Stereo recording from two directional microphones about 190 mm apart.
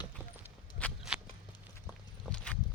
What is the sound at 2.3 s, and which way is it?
Clip-clop, 5° left (ahead or behind).